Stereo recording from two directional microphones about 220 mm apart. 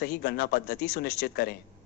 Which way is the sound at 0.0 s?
50° left (ahead or behind).